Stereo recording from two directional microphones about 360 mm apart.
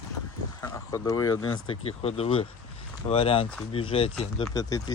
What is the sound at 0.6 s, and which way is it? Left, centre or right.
Speech, centre.